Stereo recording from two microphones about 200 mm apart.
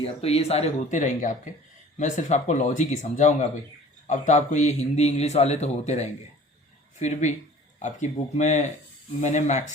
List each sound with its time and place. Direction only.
0.0 s a man's voice: 30° left (ahead or behind)